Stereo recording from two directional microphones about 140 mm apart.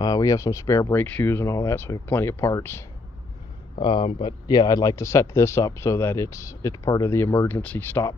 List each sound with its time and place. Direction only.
0.0 s speech: 25° left (ahead or behind)
3.7 s speech: 35° left (ahead or behind); by 8.1 s 10° left (ahead or behind)